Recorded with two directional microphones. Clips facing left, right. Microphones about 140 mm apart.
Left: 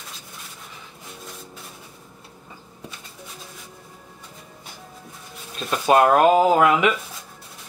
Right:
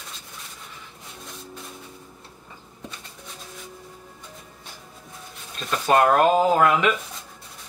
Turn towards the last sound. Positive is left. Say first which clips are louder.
# left 2 dB
turn(degrees=10)  # may be behind; listen again after turning